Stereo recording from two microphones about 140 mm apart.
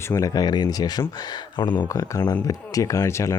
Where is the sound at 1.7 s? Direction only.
15° left (ahead or behind).